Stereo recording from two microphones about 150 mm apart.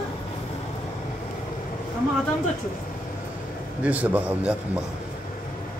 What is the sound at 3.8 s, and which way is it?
Speech, 10° right (ahead or behind).